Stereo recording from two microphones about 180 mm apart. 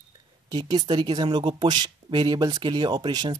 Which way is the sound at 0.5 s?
25° right (ahead or behind).